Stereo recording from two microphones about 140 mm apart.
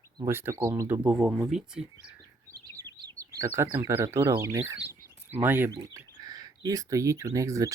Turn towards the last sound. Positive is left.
turn(degrees=-25)  # may be behind; listen again after turning